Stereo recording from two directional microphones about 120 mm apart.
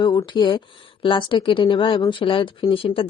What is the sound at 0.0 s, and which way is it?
A woman's voice, 35° left (ahead or behind).